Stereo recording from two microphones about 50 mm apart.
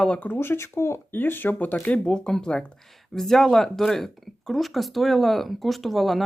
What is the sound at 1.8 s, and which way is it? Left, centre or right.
Speech, left.